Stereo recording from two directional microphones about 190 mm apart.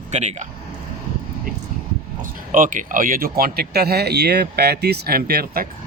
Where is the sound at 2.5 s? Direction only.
45° right (ahead or behind).